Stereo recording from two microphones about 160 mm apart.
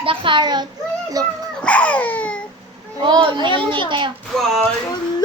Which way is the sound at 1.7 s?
10° left (ahead or behind).